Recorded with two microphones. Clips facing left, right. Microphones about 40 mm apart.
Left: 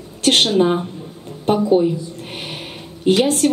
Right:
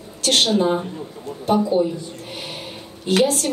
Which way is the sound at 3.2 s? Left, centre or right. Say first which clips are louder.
Left 5 dB; left.